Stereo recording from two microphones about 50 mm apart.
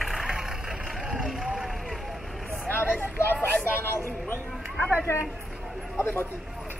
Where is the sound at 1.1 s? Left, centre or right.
Centre.